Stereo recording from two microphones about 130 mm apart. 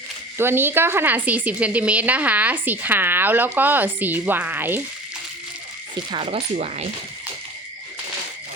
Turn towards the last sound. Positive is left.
turn(degrees=-55)  # may be behind; listen again after turning